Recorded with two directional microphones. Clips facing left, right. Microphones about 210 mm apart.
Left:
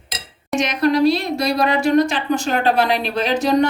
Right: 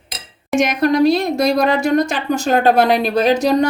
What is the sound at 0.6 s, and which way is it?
Speech, 50° right (ahead or behind).